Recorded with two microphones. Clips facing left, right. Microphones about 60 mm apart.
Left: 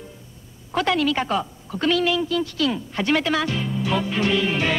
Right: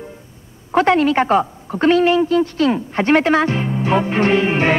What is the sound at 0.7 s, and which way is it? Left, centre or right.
A woman's voice, right.